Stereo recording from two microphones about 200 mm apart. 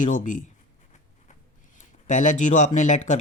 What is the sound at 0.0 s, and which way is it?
Speech, 40° left (ahead or behind).